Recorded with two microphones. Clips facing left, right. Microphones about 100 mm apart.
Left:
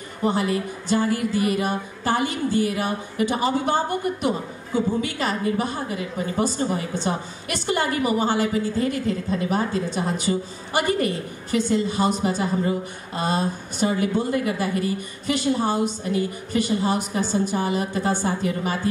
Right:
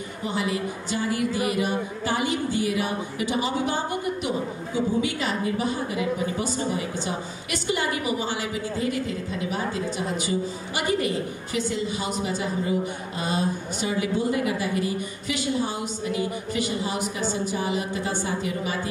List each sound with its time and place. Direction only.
0.2 s speech: 45° left (ahead or behind)